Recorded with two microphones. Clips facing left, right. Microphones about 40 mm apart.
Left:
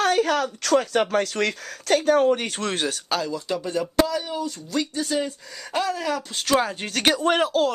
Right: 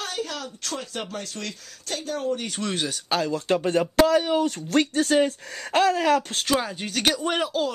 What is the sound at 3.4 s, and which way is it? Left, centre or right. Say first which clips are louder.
Speech: right 4 dB; right.